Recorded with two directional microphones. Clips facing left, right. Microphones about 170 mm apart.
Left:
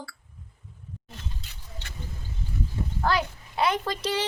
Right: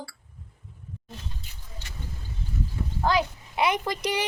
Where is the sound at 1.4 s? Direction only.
80° left.